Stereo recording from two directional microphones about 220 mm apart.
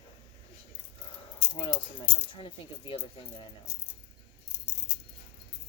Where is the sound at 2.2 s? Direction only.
25° left (ahead or behind).